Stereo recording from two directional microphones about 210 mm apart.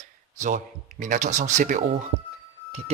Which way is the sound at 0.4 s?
40° right (ahead or behind).